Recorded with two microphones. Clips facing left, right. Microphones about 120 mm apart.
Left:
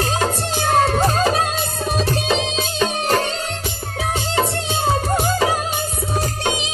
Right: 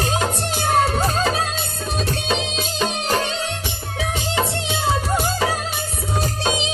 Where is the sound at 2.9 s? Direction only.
50° left (ahead or behind).